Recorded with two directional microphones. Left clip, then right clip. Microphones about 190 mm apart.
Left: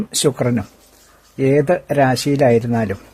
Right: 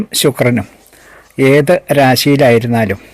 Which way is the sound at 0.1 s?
10° right (ahead or behind).